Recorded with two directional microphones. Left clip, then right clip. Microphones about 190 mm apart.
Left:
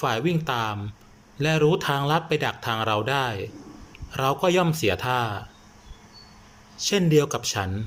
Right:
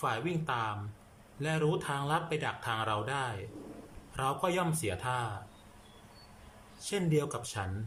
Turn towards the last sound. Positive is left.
turn(degrees=20)  # may be behind; listen again after turning